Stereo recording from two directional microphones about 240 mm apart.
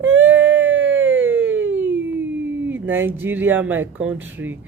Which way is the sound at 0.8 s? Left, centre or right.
Centre.